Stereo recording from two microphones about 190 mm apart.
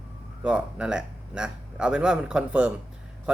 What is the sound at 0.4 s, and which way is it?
Speech, 5° right (ahead or behind).